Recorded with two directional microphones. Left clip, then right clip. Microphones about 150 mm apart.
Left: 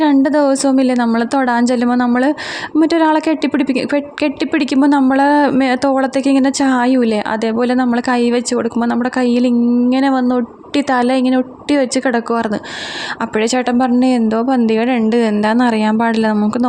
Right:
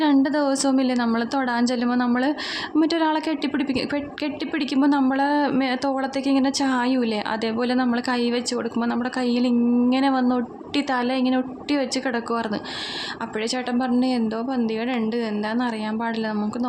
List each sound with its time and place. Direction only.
0.0 s a woman's voice: 40° left (ahead or behind)